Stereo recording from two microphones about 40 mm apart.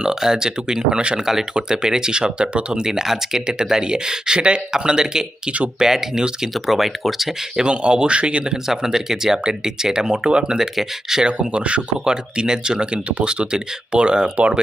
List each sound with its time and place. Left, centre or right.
0.0 s speech: centre
5.5 s speech: right
5.8 s speech: centre
7.5 s speech: right
8.6 s speech: centre
10.6 s speech: centre
11.3 s speech: right
12.0 s speech: centre